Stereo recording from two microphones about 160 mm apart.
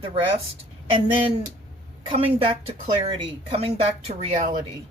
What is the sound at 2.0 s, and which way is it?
Speech, 35° right (ahead or behind).